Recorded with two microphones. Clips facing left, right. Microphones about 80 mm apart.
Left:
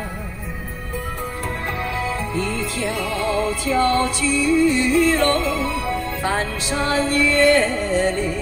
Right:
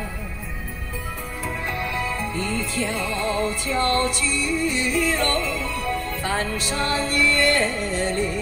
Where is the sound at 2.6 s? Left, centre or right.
Left.